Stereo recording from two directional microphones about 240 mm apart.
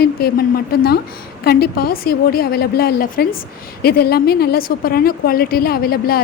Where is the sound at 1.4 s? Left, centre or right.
Left.